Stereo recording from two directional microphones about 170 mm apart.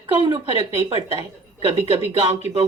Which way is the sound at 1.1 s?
35° right (ahead or behind).